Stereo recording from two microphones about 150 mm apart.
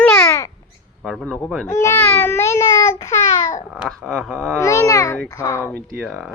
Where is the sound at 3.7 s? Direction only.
5° right (ahead or behind).